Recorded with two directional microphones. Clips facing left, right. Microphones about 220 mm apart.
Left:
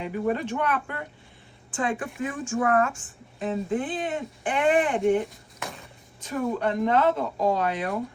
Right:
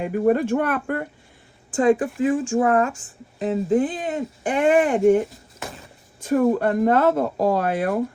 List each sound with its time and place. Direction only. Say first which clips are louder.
0.0 s speech: right 7 dB; 50° right (ahead or behind)
2.2 s speech: right 7 dB; 30° right (ahead or behind)
5.2 s a sound: right 3 dB; centre (ahead or behind)
6.2 s speech: right 8 dB; 50° right (ahead or behind)